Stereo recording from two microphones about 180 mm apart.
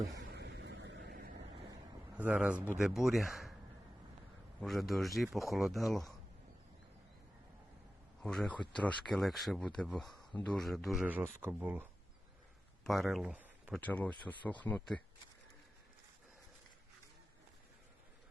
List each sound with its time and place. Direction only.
0.3 s waves: 70° right (ahead or behind)
2.1 s speech: 5° right (ahead or behind)
4.6 s speech: centre (ahead or behind)
8.2 s speech: 5° left (ahead or behind)
12.8 s speech: centre (ahead or behind)
13.7 s speech: 10° left (ahead or behind)